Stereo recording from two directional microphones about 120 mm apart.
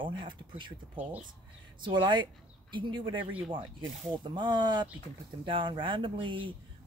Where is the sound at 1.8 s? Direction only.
40° right (ahead or behind).